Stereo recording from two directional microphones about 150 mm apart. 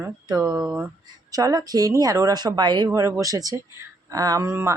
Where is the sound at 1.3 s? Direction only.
25° right (ahead or behind).